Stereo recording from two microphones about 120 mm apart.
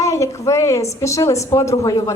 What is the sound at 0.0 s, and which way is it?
A woman's voice, 25° left (ahead or behind).